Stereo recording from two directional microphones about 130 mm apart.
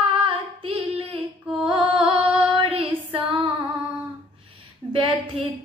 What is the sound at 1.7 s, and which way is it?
Music, 45° right (ahead or behind).